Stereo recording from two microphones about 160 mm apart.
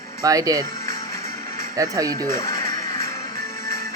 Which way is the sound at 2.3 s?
20° left (ahead or behind).